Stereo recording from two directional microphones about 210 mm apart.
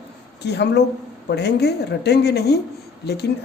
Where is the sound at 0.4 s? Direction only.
55° left (ahead or behind).